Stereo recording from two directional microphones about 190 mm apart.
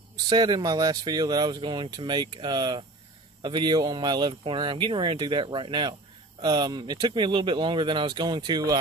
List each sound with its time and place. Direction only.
0.3 s speech: 20° right (ahead or behind)